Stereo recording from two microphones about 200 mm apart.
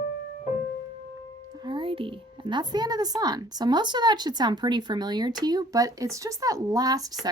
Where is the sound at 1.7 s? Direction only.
25° right (ahead or behind).